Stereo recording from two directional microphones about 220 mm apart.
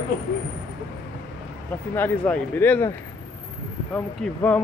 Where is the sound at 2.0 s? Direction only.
5° left (ahead or behind).